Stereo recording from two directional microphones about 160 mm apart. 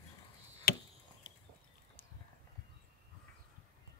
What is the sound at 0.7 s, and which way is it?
Chop, 75° left (ahead or behind).